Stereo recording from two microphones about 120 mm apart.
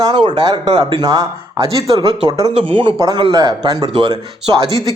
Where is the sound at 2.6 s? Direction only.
45° right (ahead or behind).